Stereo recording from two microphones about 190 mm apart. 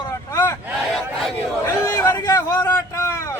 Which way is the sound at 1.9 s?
15° left (ahead or behind).